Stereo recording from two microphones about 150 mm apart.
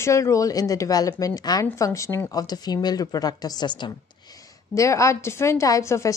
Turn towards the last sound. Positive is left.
turn(degrees=20)  # may be behind; listen again after turning